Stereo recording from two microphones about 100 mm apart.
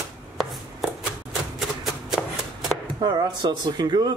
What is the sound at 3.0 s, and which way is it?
Cutlery, 45° right (ahead or behind).